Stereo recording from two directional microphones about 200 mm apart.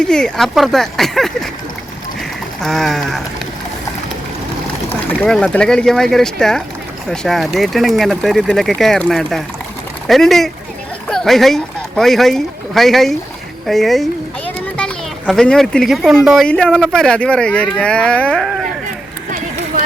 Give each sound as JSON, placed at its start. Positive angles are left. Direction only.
{"t": 0.0, "sound": "speech", "side_deg": 5}
{"t": 2.6, "sound": "speech", "side_deg": 0}
{"t": 4.9, "sound": "speech", "side_deg": 5}